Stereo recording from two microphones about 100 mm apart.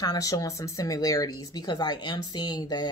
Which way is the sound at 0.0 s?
40° left (ahead or behind).